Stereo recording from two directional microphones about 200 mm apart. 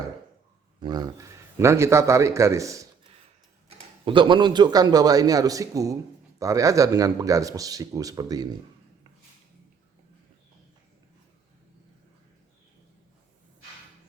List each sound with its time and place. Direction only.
0.8 s a man's voice: 20° right (ahead or behind)